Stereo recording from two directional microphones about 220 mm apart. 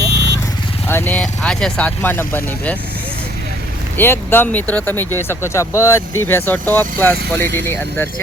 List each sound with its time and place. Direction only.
0.0 s vehicle: 50° right (ahead or behind)
0.9 s speech: 10° left (ahead or behind)
3.9 s speech: 10° left (ahead or behind)